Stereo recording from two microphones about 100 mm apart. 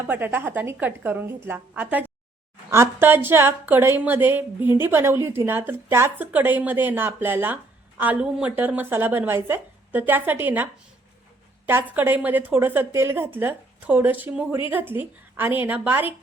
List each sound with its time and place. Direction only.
0.0 s speech: 20° right (ahead or behind)
2.6 s speech: 25° right (ahead or behind)